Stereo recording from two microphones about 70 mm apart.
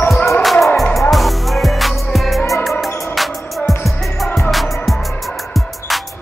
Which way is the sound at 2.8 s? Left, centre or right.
Left.